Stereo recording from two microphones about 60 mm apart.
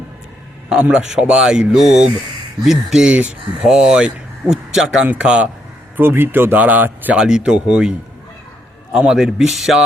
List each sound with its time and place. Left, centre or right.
0.8 s speech: centre
6.0 s speech: right
7.2 s speech: centre
9.0 s speech: centre